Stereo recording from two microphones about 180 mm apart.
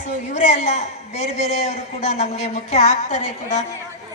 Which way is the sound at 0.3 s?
40° left (ahead or behind).